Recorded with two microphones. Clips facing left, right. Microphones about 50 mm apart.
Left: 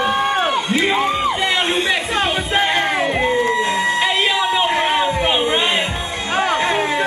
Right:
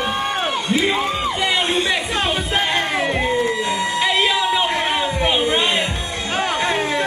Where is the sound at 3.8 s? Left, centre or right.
Centre.